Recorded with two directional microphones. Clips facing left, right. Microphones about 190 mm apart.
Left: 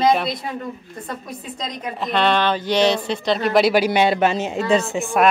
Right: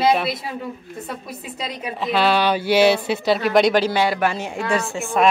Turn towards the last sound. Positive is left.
turn(degrees=20)  # may be behind; listen again after turning